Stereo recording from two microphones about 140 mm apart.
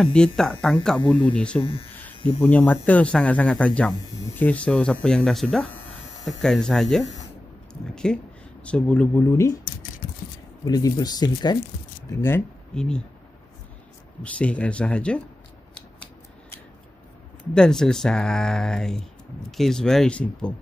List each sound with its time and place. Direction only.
0.0 s speech: 5° left (ahead or behind)
1.6 s speech: 40° left (ahead or behind)
2.1 s hum: 40° left (ahead or behind)
2.4 s speech: 10° left (ahead or behind)
9.2 s speech: 20° left (ahead or behind)
10.7 s speech: 30° left (ahead or behind)
12.1 s speech: 15° left (ahead or behind)
12.7 s speech: 5° left (ahead or behind)
14.2 s speech: 10° left (ahead or behind)
17.6 s speech: 5° left (ahead or behind)